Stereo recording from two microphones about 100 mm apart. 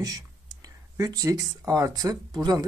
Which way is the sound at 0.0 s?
40° right (ahead or behind).